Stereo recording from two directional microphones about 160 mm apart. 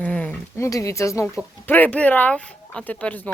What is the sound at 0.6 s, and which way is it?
Speech, 20° left (ahead or behind).